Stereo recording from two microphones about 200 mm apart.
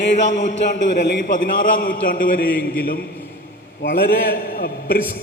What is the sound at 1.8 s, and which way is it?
A man's voice, 45° left (ahead or behind).